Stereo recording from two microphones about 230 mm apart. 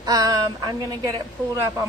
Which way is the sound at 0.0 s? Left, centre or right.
Centre.